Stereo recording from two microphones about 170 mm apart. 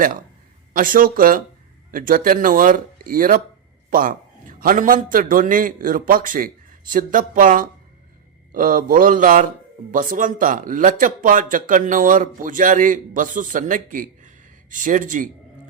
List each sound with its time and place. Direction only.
0.7 s speech: 55° right (ahead or behind)